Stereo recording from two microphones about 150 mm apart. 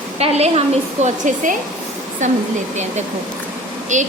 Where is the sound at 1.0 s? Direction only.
55° right (ahead or behind).